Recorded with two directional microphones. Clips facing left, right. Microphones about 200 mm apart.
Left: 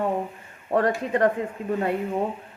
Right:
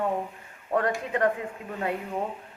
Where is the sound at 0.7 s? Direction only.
35° left (ahead or behind).